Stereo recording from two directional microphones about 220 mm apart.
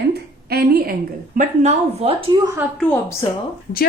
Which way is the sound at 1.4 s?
30° right (ahead or behind).